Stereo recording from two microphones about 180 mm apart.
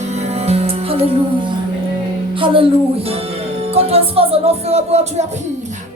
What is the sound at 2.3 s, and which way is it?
Speech, 30° right (ahead or behind).